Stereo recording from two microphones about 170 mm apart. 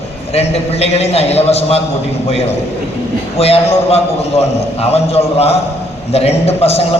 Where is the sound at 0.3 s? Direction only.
35° left (ahead or behind).